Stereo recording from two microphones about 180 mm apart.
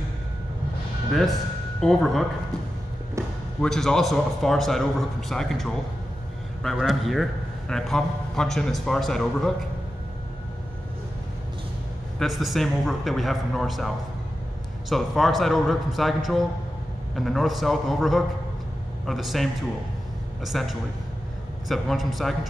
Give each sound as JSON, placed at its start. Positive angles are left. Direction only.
{"t": 1.8, "sound": "a man's voice", "side_deg": 0}
{"t": 3.2, "sound": "basketball bounce", "side_deg": -15}
{"t": 3.6, "sound": "a man's voice", "side_deg": 5}
{"t": 12.2, "sound": "a man's voice", "side_deg": 0}